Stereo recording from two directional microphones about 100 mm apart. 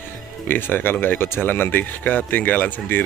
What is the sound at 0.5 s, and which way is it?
Speech, 20° left (ahead or behind).